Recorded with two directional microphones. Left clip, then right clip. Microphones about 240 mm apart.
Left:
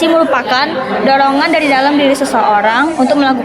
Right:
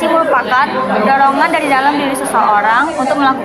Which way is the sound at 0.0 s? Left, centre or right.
Left.